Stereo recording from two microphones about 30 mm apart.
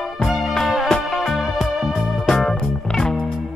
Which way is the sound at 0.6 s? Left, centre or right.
Centre.